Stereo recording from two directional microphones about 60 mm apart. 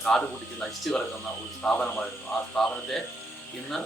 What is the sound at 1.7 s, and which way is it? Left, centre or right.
Speech, centre.